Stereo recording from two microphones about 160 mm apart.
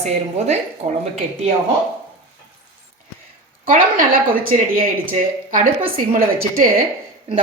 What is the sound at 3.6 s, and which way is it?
A woman's voice, 60° right (ahead or behind).